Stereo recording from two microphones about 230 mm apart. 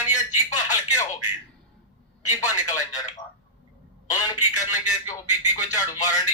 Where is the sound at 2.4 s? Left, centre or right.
Centre.